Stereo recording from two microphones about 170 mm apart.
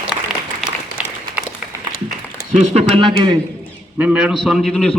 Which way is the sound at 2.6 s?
35° right (ahead or behind).